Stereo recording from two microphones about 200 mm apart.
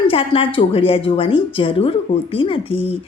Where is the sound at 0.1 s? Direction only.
25° left (ahead or behind).